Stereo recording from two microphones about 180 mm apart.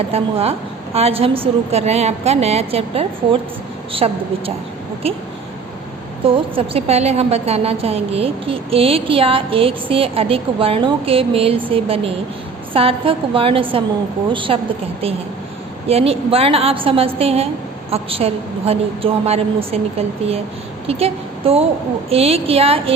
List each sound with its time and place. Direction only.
0.1 s a woman's voice: 35° right (ahead or behind)
6.2 s a woman's voice: 35° right (ahead or behind)
15.9 s a woman's voice: 35° right (ahead or behind)